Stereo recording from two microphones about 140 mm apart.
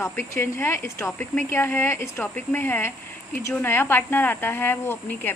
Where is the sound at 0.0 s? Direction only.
15° left (ahead or behind).